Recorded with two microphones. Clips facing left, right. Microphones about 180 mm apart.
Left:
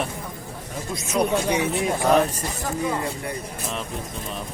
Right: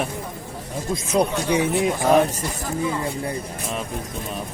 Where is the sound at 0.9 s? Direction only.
30° right (ahead or behind).